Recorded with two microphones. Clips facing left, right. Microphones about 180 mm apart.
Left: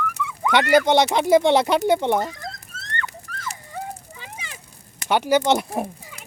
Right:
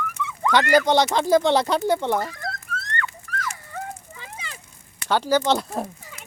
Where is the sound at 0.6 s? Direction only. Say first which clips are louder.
Left 2 dB; centre (ahead or behind).